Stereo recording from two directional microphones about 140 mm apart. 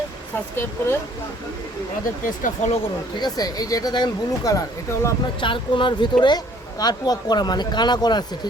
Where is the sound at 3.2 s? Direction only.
30° left (ahead or behind).